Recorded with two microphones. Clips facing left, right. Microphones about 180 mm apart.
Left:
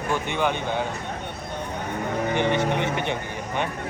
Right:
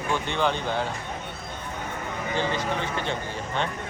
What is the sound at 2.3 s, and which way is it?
Speech, 20° left (ahead or behind).